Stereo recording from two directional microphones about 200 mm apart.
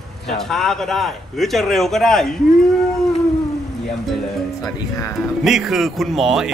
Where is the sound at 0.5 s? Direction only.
Centre (ahead or behind).